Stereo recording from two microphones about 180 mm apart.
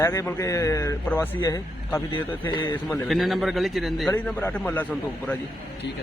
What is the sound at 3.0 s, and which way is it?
A man's voice, centre (ahead or behind).